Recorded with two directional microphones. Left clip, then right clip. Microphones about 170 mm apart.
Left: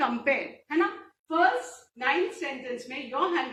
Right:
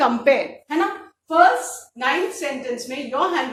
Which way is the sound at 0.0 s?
35° right (ahead or behind).